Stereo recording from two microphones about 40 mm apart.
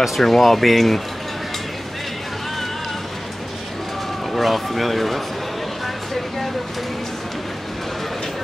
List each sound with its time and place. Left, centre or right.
0.2 s speech: centre
4.3 s speech: centre